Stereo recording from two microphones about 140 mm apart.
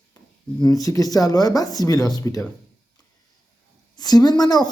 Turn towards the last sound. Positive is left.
turn(degrees=25)  # may be behind; listen again after turning